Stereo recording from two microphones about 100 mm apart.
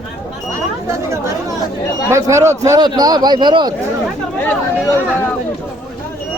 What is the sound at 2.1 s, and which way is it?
Speech, 30° right (ahead or behind).